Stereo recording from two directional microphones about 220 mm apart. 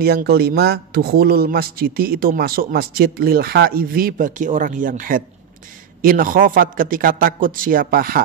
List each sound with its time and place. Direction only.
0.0 s a man's voice: 45° right (ahead or behind)